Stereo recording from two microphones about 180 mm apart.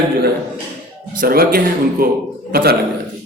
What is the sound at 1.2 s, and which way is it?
A man's voice, 55° right (ahead or behind).